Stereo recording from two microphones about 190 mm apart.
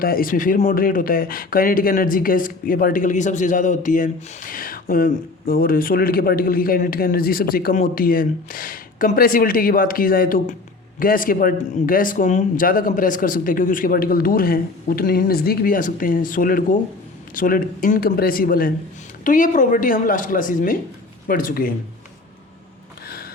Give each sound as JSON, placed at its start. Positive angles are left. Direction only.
{"t": 0.0, "sound": "speech", "side_deg": 50}